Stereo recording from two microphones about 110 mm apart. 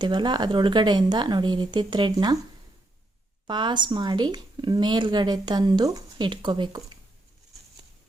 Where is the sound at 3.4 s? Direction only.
45° right (ahead or behind).